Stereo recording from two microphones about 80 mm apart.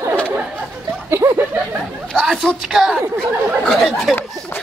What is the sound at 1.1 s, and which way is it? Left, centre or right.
Speech, right.